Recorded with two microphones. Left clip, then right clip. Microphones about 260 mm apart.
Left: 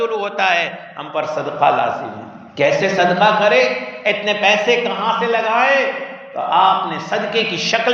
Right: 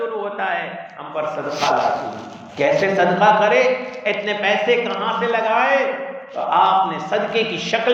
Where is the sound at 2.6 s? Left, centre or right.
Left.